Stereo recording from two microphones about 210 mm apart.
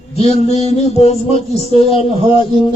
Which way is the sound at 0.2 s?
30° left (ahead or behind).